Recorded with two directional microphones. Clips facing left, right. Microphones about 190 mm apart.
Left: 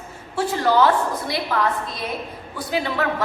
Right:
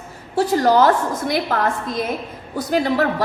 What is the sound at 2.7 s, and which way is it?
Speech, 40° right (ahead or behind).